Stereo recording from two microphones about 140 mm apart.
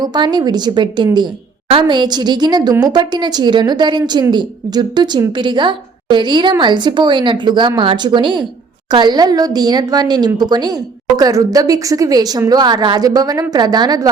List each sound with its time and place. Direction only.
0.0 s a woman's voice: 30° right (ahead or behind)